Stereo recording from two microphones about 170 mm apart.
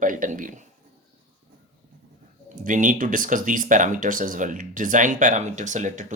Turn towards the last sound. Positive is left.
turn(degrees=-45)  # may be behind; listen again after turning